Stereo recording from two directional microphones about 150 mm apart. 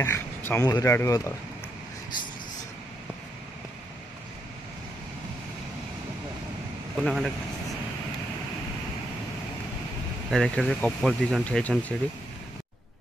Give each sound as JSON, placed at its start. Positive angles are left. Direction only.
{"t": 0.0, "sound": "a sound", "side_deg": 15}
{"t": 0.7, "sound": "speech", "side_deg": 25}
{"t": 7.0, "sound": "speech", "side_deg": 0}
{"t": 10.3, "sound": "speech", "side_deg": 0}